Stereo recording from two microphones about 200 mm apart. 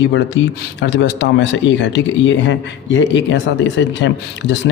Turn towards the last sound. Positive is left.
turn(degrees=65)  # may be behind; listen again after turning